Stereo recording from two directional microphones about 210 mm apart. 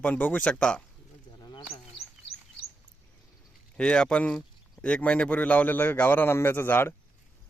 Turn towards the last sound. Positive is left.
turn(degrees=10)  # may be behind; listen again after turning